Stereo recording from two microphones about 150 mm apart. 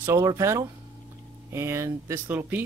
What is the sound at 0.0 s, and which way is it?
Speech, 15° right (ahead or behind).